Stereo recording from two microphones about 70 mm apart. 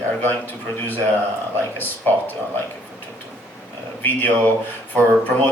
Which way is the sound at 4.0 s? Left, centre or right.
Left.